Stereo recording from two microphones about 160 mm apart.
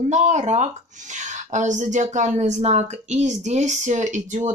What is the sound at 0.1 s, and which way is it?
Speech, 45° right (ahead or behind).